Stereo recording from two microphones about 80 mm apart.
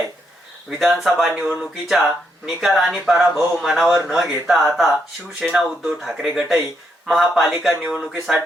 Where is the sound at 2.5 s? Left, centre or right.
Centre.